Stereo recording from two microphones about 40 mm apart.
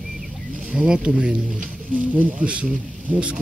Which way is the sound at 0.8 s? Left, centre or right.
Right.